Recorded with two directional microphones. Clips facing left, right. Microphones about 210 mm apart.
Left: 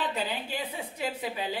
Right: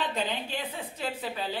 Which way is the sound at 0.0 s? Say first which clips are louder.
Right 1 dB; 5° left (ahead or behind).